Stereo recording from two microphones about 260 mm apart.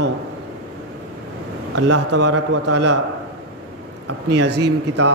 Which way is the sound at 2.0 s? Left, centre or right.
Right.